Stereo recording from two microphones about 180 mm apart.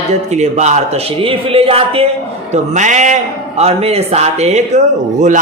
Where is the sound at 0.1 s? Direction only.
40° right (ahead or behind).